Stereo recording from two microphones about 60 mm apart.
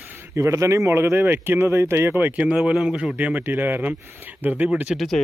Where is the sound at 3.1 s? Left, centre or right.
Right.